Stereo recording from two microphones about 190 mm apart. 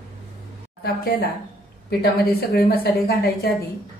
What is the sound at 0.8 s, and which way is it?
A woman's voice, 55° left (ahead or behind).